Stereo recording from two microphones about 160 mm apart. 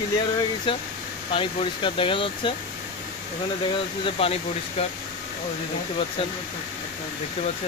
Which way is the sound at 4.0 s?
40° left (ahead or behind).